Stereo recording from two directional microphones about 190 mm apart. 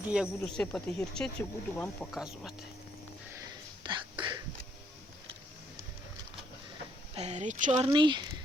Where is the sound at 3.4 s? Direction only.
25° right (ahead or behind).